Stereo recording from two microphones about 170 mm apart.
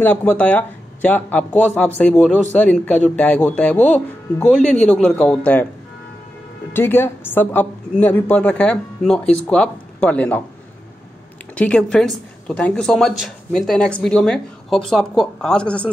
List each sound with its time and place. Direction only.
0.0 s speech: 10° left (ahead or behind)
6.7 s speech: 15° left (ahead or behind)
11.5 s a woman's voice: 5° left (ahead or behind)